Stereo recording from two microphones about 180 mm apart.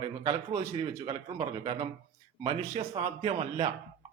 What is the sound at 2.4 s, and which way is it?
A man's voice, 30° right (ahead or behind).